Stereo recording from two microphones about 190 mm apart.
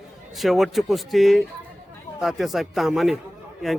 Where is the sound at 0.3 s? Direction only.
Centre (ahead or behind).